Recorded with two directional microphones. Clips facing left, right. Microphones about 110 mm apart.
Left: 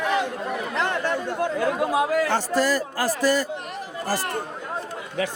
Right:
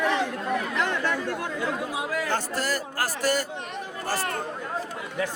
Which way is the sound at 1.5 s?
90° left.